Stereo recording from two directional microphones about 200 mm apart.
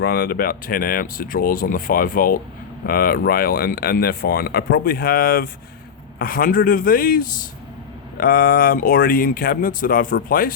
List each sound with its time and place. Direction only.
0.0 s speech: 50° left (ahead or behind)